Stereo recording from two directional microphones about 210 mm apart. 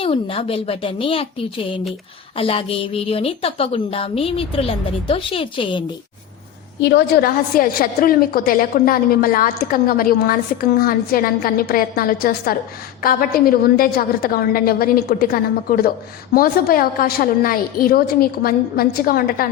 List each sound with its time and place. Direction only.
0.0 s a woman's voice: 25° left (ahead or behind)
6.8 s a woman's voice: 50° left (ahead or behind)